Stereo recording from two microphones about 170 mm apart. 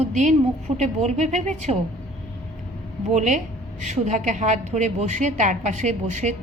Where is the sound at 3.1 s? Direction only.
45° right (ahead or behind).